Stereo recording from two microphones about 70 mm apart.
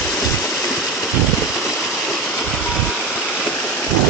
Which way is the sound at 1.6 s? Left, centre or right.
Centre.